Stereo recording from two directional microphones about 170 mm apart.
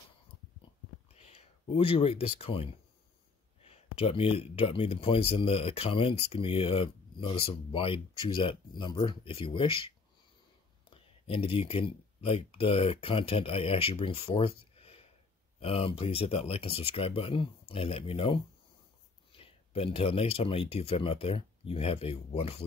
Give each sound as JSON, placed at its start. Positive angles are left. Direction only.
{"t": 1.1, "sound": "speech", "side_deg": 40}
{"t": 4.0, "sound": "speech", "side_deg": 35}